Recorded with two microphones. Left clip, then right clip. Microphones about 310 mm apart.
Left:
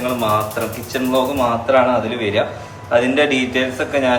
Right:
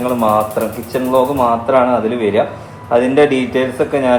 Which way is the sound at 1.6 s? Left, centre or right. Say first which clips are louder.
Right 2 dB; centre.